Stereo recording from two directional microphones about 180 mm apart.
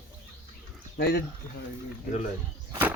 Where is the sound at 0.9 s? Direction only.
60° left (ahead or behind).